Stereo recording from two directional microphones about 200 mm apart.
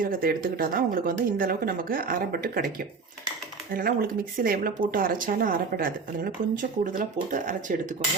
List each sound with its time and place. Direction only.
0.0 s speech: 45° right (ahead or behind)